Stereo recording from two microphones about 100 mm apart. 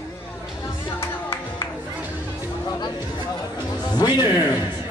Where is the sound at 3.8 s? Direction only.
45° left (ahead or behind).